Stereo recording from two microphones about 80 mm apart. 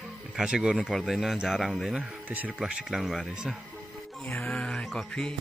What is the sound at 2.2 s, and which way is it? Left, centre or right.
Speech, right.